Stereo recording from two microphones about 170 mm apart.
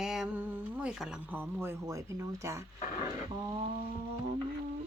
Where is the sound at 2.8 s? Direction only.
45° left (ahead or behind).